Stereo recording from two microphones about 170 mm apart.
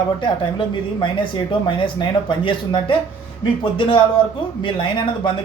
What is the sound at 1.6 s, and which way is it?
Speech, 30° left (ahead or behind).